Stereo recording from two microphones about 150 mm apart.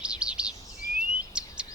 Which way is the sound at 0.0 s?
5° right (ahead or behind).